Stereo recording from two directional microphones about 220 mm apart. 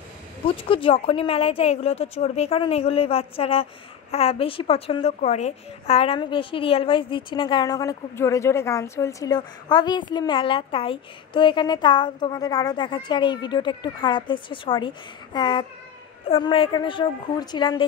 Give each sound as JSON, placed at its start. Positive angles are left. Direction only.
{"t": 0.7, "sound": "a woman's voice", "side_deg": 25}